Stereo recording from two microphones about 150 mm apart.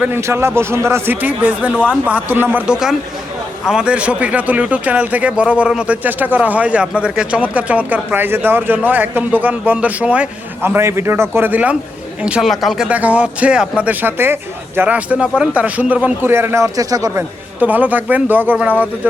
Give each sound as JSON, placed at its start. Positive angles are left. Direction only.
{"t": 0.0, "sound": "speech", "side_deg": -15}
{"t": 17.6, "sound": "speech", "side_deg": -10}